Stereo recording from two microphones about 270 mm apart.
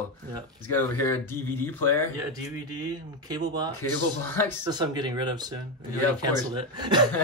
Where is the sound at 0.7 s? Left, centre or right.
Centre.